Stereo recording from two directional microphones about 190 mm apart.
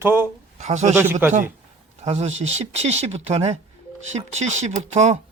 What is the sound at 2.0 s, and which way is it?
Speech, 35° right (ahead or behind).